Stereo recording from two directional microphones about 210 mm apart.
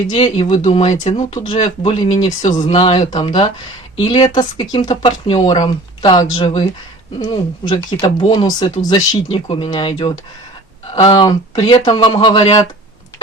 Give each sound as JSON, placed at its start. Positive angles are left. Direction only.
{"t": 0.1, "sound": "speech", "side_deg": 20}
{"t": 7.7, "sound": "speech", "side_deg": 20}